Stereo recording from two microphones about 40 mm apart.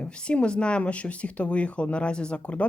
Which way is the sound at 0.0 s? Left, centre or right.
Left.